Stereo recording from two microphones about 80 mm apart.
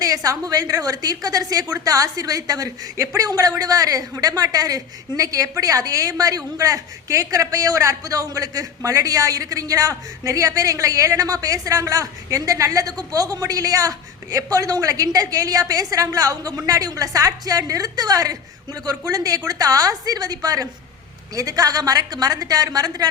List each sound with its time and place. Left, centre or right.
0.0 s a woman's voice: right